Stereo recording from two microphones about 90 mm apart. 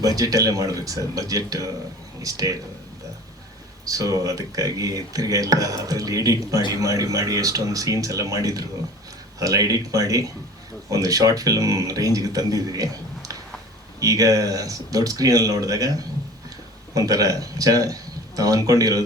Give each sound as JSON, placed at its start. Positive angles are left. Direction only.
{"t": 0.0, "sound": "speech", "side_deg": -40}
{"t": 3.8, "sound": "speech", "side_deg": -40}